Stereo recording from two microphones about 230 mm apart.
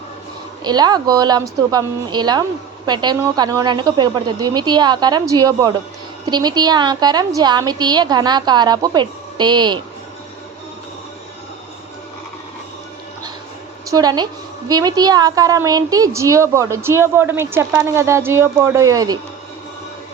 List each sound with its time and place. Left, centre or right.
0.6 s a woman's voice: centre
13.9 s a woman's voice: centre